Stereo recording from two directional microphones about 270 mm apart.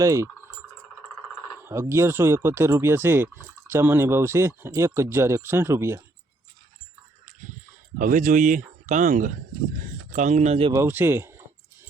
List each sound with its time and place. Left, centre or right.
0.0 s speech: centre
1.5 s speech: centre
7.9 s speech: right; by 11.4 s centre